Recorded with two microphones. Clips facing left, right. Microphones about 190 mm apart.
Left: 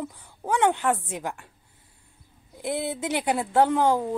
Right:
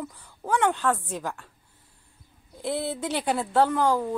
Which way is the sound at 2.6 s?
15° left (ahead or behind).